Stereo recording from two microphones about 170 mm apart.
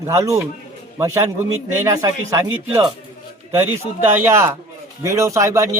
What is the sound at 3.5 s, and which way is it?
A man's voice, 15° right (ahead or behind).